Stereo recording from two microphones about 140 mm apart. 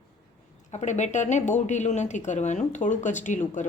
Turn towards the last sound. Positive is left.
turn(degrees=60)  # may be behind; listen again after turning